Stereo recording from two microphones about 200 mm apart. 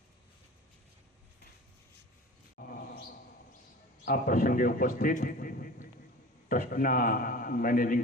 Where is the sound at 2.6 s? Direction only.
50° left (ahead or behind).